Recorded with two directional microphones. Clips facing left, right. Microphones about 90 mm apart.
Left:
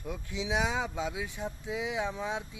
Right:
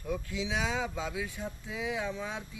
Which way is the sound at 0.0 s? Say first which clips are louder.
Right 2 dB; 20° left (ahead or behind).